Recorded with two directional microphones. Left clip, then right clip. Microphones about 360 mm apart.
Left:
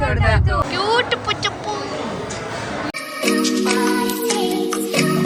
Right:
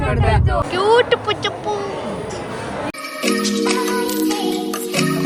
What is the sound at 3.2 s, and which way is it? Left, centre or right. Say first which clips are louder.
Music: even; centre.